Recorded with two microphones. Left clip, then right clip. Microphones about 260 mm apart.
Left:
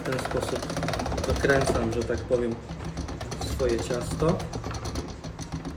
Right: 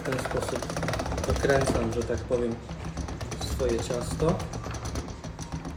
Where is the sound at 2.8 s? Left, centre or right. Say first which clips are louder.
Left 1 dB; right.